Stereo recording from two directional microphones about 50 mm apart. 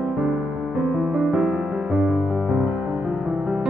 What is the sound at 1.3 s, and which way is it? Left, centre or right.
Music, centre.